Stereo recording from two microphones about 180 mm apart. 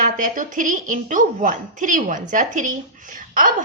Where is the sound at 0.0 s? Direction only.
45° right (ahead or behind).